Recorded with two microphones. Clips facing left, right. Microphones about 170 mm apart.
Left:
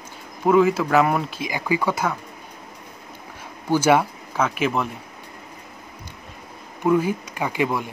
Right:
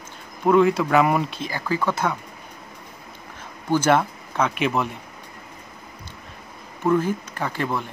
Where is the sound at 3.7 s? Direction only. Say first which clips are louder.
Left 1 dB; 10° left (ahead or behind).